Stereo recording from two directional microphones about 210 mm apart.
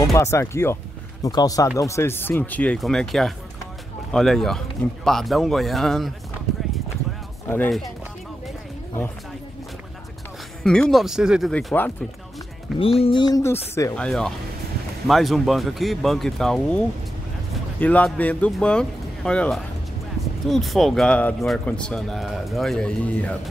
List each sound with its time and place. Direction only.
0.0 s a man's voice: 15° left (ahead or behind)
7.4 s speech: 10° left (ahead or behind)
10.6 s a man's voice: centre (ahead or behind)
12.7 s a man's voice: 25° left (ahead or behind); by 23.3 s 5° left (ahead or behind)